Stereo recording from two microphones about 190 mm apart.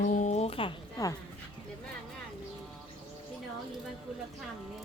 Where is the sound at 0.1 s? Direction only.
40° left (ahead or behind).